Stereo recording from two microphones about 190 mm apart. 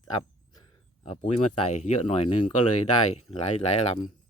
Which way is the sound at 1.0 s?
30° left (ahead or behind).